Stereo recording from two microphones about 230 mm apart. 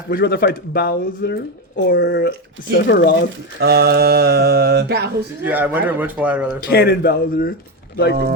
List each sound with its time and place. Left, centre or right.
0.1 s speech: left
3.6 s speech: right
5.4 s a man's voice: centre
6.7 s speech: left